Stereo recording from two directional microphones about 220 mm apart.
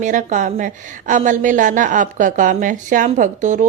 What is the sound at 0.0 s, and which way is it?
A woman's voice, 35° right (ahead or behind).